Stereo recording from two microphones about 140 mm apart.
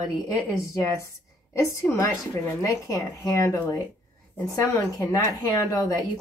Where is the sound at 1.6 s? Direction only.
20° left (ahead or behind).